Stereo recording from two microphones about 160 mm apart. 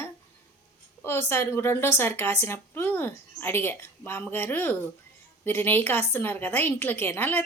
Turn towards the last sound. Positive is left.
turn(degrees=15)  # may be behind; listen again after turning